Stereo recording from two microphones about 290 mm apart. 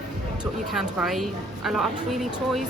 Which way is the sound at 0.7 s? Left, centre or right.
Centre.